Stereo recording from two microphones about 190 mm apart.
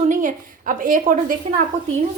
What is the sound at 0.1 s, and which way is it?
A woman's voice, 45° right (ahead or behind).